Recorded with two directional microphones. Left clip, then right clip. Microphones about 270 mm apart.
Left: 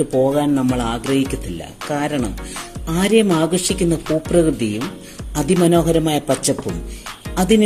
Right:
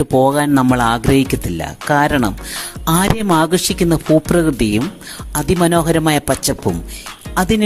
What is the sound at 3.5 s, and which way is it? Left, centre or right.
Speech, right.